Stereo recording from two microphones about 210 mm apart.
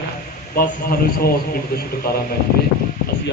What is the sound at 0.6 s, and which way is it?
A man's voice, 45° left (ahead or behind).